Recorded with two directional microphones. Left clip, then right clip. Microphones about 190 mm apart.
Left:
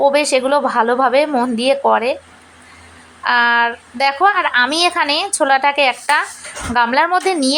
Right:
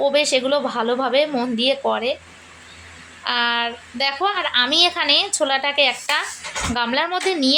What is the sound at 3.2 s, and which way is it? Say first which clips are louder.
Speech: left 7 dB; 15° left (ahead or behind).